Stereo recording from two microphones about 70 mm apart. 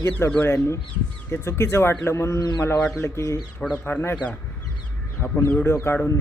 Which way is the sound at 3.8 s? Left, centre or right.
Left.